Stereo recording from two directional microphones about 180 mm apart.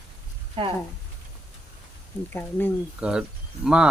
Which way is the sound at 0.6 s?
30° right (ahead or behind).